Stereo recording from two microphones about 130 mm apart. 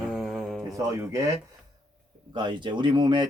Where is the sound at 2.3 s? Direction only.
35° right (ahead or behind).